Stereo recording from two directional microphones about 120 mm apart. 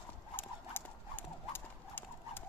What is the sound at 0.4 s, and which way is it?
Clip-clop, 15° left (ahead or behind).